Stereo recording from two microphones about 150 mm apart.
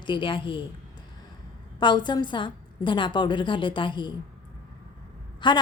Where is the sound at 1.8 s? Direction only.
30° left (ahead or behind).